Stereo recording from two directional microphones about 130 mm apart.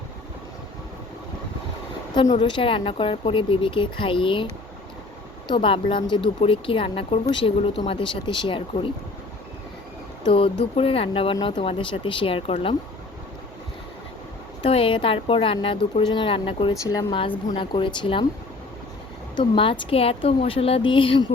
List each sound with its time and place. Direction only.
2.3 s speech: 40° left (ahead or behind)
10.2 s speech: 45° left (ahead or behind)
14.6 s speech: 45° left (ahead or behind)
19.4 s speech: 40° left (ahead or behind)